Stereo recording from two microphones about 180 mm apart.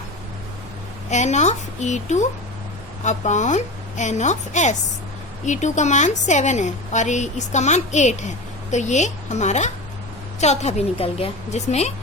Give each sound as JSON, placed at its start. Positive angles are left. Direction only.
{"t": 1.1, "sound": "a woman's voice", "side_deg": 40}